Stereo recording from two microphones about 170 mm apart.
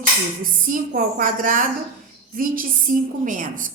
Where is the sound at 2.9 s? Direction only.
55° right (ahead or behind).